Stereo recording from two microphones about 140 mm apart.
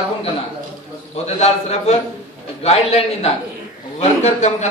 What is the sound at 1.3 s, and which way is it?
A man's voice, 50° left (ahead or behind).